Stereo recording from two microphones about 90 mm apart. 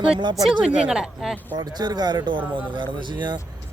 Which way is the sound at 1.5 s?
50° right (ahead or behind).